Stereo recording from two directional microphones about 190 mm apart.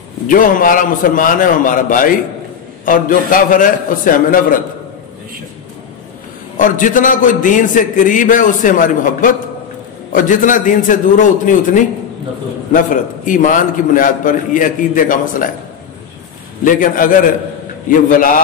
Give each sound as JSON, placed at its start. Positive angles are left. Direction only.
{"t": 0.3, "sound": "a man's voice", "side_deg": 45}
{"t": 6.5, "sound": "a man's voice", "side_deg": 45}
{"t": 16.6, "sound": "a man's voice", "side_deg": 45}